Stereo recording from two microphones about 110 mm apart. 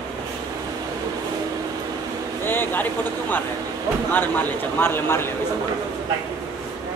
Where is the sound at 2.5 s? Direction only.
20° left (ahead or behind).